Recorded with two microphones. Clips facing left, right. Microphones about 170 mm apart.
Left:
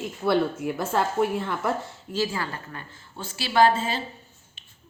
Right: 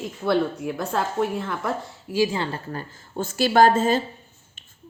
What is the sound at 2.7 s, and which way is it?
Speech, 40° right (ahead or behind).